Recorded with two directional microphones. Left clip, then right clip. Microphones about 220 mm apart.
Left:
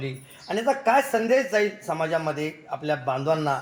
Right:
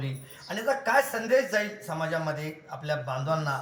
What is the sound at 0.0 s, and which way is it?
A man's voice, 25° left (ahead or behind).